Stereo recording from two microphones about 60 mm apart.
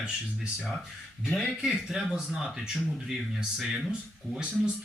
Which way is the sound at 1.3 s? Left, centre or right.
Left.